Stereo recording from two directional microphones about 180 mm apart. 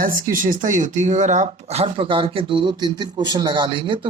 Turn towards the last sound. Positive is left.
turn(degrees=-30)  # may be behind; listen again after turning